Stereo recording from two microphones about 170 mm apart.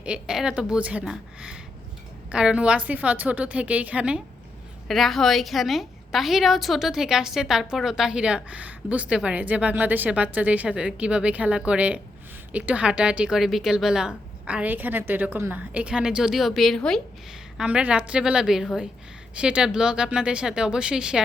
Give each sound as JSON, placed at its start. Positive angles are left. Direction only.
{"t": 0.0, "sound": "a woman's voice", "side_deg": -5}